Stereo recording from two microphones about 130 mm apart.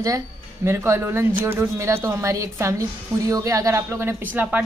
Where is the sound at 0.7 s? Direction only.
20° right (ahead or behind).